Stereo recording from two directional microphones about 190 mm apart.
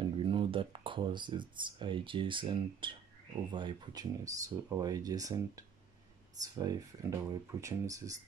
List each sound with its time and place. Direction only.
0.0 s speech: 25° right (ahead or behind)